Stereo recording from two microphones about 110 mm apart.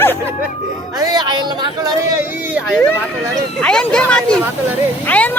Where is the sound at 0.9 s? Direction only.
35° right (ahead or behind).